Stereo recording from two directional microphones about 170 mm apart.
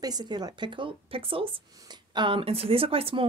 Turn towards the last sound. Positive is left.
turn(degrees=-35)  # may be behind; listen again after turning